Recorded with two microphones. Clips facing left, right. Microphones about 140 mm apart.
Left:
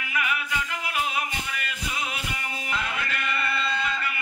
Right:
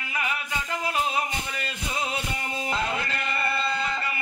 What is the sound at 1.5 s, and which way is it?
Music, 30° right (ahead or behind).